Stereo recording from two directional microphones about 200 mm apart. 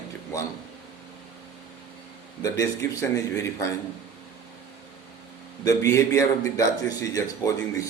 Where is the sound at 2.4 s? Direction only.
15° left (ahead or behind).